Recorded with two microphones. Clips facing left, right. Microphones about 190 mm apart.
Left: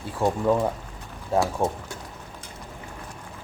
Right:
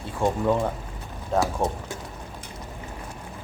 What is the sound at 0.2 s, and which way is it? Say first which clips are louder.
Speech: left 1 dB; 5° left (ahead or behind).